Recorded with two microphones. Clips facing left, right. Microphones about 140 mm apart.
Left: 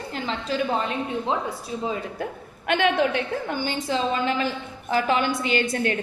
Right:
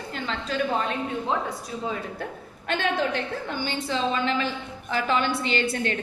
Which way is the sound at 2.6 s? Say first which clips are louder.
Left 4 dB; 60° left (ahead or behind).